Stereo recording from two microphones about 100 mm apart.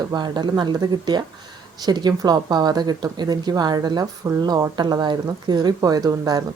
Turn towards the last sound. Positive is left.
turn(degrees=-40)  # may be behind; listen again after turning